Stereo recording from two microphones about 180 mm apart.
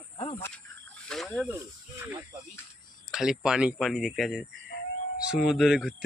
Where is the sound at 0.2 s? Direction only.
35° left (ahead or behind).